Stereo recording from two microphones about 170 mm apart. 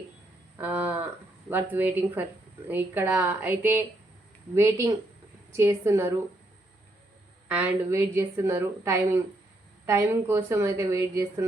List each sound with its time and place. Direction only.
0.6 s a woman's voice: 10° right (ahead or behind)
7.4 s a woman's voice: 10° right (ahead or behind)